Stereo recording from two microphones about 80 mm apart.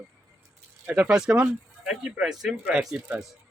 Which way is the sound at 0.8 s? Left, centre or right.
Right.